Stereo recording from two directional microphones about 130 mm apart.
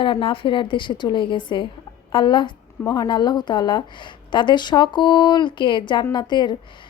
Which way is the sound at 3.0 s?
35° left (ahead or behind).